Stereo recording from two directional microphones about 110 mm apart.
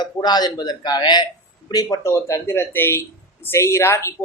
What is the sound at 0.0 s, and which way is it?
A man's voice, 40° left (ahead or behind).